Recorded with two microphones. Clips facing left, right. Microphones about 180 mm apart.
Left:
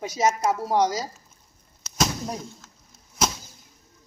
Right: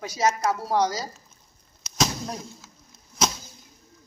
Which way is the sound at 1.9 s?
5° left (ahead or behind).